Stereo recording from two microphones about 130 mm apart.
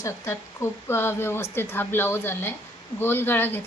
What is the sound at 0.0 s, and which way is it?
A woman's voice, 20° left (ahead or behind).